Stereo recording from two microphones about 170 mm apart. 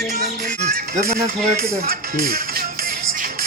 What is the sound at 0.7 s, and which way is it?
Speech, 55° right (ahead or behind).